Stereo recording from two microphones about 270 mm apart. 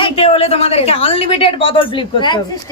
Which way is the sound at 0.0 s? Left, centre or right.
Left.